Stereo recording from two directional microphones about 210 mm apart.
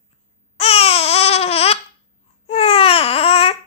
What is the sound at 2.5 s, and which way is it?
Babbling, 25° left (ahead or behind).